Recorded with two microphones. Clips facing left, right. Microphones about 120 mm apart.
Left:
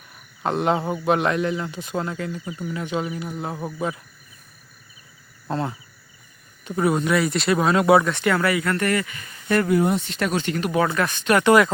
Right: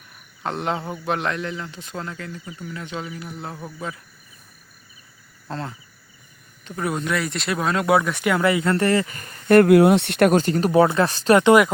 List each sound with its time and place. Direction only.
0.4 s a man's voice: 5° left (ahead or behind)
2.4 s speech: 30° left (ahead or behind)
2.6 s a man's voice: 10° left (ahead or behind)
5.5 s cricket: 15° left (ahead or behind)
6.7 s speech: 5° left (ahead or behind)
8.1 s speech: 15° right (ahead or behind); by 9.1 s 30° right (ahead or behind)
9.1 s speech: 50° right (ahead or behind)
10.3 s speech: 40° right (ahead or behind)
11.3 s speech: 20° right (ahead or behind)